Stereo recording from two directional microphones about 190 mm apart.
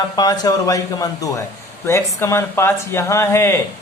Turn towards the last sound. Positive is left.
turn(degrees=15)  # may be behind; listen again after turning